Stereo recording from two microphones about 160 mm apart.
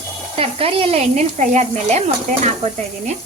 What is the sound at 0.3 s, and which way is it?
Speech, 35° right (ahead or behind).